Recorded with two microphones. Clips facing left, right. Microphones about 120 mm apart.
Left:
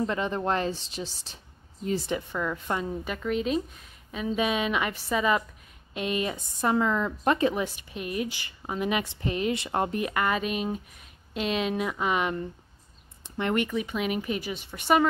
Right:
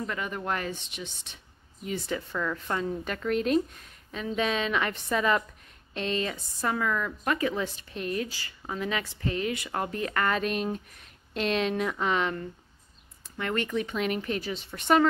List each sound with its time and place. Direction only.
0.0 s a woman's voice: 30° left (ahead or behind)
2.0 s a woman's voice: 15° left (ahead or behind)
7.6 s a woman's voice: 10° left (ahead or behind)
13.2 s a sound: 20° left (ahead or behind)
13.7 s a woman's voice: 5° left (ahead or behind)